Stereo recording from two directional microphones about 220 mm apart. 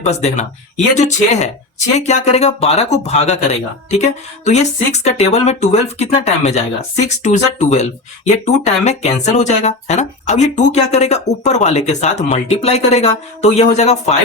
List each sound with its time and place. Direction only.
0.0 s speech: 30° left (ahead or behind)